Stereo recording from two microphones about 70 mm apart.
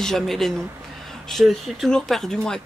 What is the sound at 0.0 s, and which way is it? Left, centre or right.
Speech, centre.